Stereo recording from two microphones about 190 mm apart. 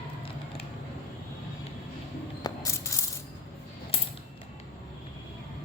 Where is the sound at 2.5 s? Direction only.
20° left (ahead or behind).